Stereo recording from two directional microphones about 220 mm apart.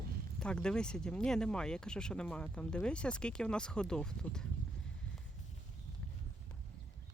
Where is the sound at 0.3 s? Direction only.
5° left (ahead or behind).